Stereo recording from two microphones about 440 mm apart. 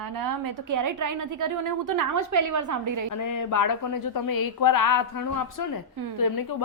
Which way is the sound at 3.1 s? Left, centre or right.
Left.